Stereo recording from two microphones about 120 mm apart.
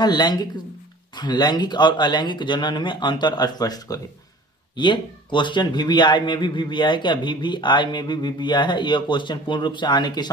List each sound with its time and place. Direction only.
0.0 s a man's voice: 35° left (ahead or behind)